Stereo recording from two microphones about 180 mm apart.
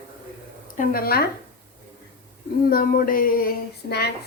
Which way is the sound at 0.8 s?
55° left (ahead or behind).